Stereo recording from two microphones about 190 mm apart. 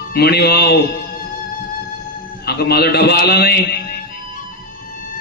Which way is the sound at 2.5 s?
55° left (ahead or behind).